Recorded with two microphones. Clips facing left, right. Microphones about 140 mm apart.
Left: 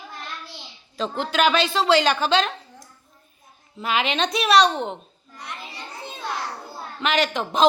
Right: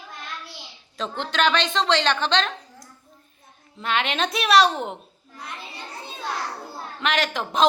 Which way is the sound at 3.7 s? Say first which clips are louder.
Left 1 dB; 5° left (ahead or behind).